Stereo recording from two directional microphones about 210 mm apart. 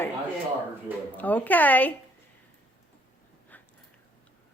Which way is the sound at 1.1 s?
10° left (ahead or behind).